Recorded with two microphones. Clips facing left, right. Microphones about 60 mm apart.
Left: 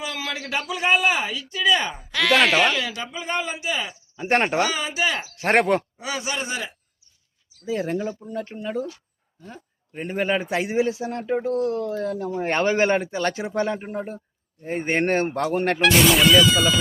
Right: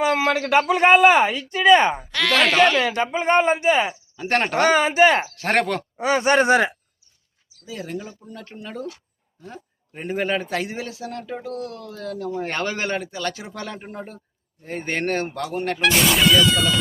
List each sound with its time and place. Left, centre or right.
0.0 s speech: right
2.1 s speech: centre
2.7 s speech: right
4.2 s a man's voice: centre
4.5 s speech: right
5.4 s a man's voice: left
6.0 s speech: right
7.6 s speech: left
8.2 s a man's voice: left
8.6 s a man's voice: centre; by 13.7 s left
13.7 s a man's voice: centre; by 15.8 s left
15.8 s speech: centre